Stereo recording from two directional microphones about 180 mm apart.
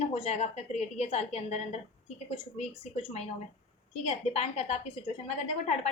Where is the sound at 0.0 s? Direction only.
35° left (ahead or behind).